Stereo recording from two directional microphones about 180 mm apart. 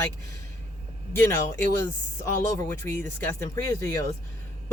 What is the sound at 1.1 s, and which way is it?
Speech, 15° left (ahead or behind).